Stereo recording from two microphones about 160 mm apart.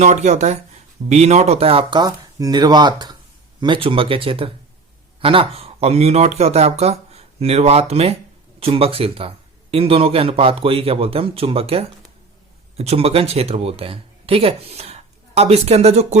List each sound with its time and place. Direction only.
0.0 s speech: 45° right (ahead or behind)